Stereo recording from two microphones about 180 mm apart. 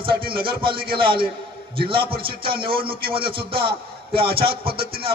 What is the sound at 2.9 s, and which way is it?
Speech, 55° right (ahead or behind).